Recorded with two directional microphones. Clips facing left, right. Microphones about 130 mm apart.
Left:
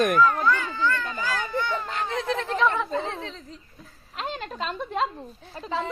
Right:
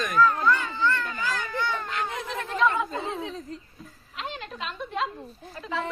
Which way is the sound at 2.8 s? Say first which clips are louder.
Left 1 dB; 15° right (ahead or behind).